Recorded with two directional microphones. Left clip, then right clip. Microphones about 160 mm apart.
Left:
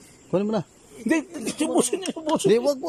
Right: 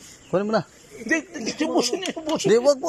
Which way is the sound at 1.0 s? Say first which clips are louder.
Even; 30° left (ahead or behind).